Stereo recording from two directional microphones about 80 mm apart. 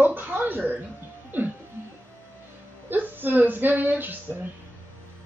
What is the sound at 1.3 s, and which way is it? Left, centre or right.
Music, right.